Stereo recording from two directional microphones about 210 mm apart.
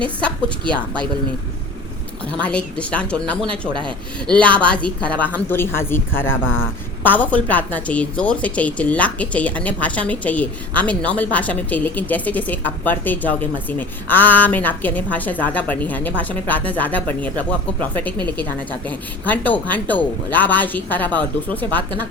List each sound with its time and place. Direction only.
2.4 s speech: 5° left (ahead or behind)
3.7 s speech: 20° right (ahead or behind)
4.3 s a woman's voice: 5° left (ahead or behind)